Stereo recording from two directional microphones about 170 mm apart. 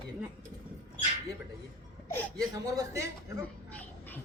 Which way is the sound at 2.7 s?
15° right (ahead or behind).